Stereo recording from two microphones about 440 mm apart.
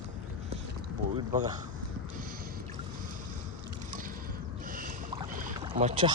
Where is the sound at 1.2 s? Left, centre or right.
Centre.